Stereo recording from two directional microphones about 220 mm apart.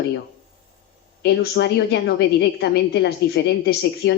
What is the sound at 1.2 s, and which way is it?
A woman's voice, 50° left (ahead or behind).